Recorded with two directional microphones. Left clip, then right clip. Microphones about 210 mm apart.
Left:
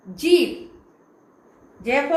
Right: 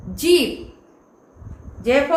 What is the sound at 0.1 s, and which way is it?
Speech, 25° right (ahead or behind).